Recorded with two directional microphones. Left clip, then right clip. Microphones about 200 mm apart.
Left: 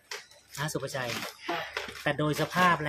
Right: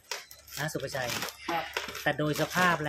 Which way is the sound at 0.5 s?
15° left (ahead or behind).